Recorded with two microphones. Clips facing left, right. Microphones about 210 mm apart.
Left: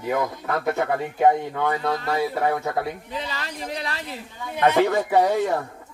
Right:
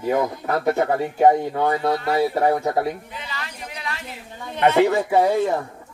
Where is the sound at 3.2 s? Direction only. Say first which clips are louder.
Left 3 dB; 35° left (ahead or behind).